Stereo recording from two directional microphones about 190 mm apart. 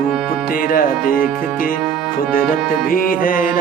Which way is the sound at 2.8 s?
50° left (ahead or behind).